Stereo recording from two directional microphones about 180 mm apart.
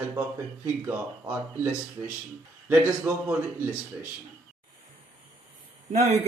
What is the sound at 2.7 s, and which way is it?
A man's voice, 10° right (ahead or behind).